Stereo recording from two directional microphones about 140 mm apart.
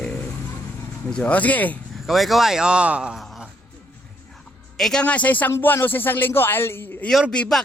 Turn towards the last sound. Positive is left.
turn(degrees=5)  # may be behind; listen again after turning